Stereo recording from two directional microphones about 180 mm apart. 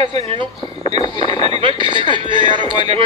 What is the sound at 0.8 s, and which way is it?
Speech, 25° left (ahead or behind).